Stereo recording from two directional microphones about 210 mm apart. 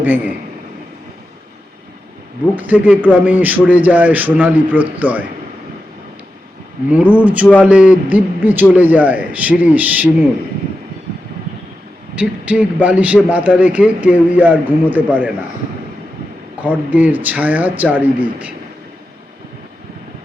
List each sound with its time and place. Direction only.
0.0 s speech: 10° right (ahead or behind)
2.6 s speech: 5° right (ahead or behind)
6.8 s speech: 5° right (ahead or behind)
12.2 s speech: 5° right (ahead or behind)
16.6 s speech: 10° right (ahead or behind)